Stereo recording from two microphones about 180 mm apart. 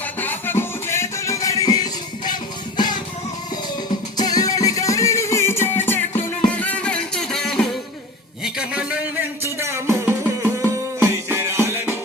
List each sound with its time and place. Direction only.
0.0 s music: 10° left (ahead or behind)
4.2 s music: 20° left (ahead or behind); by 11.9 s 15° right (ahead or behind)